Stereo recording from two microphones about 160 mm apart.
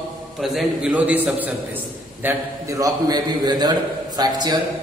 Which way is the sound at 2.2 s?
20° right (ahead or behind).